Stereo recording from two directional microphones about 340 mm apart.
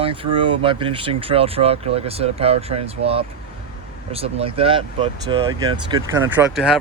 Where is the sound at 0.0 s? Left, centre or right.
Centre.